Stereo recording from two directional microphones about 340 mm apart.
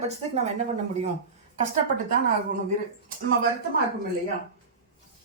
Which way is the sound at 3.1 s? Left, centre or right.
Right.